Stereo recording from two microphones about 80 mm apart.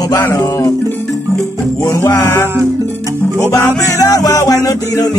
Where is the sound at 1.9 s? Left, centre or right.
Left.